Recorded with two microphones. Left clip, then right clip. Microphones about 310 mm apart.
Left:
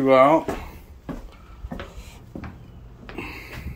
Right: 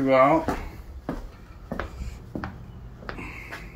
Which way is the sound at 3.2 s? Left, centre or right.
Centre.